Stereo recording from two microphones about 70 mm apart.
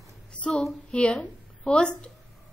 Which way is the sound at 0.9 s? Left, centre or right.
Centre.